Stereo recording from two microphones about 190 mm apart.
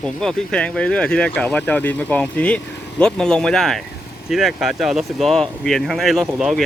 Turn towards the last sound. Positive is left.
turn(degrees=0)  # may be behind; listen again after turning